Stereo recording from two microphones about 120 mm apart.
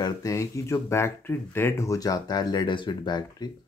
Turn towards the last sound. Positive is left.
turn(degrees=35)  # may be behind; listen again after turning